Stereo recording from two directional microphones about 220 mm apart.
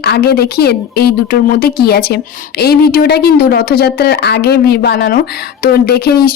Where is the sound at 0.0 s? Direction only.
45° left (ahead or behind).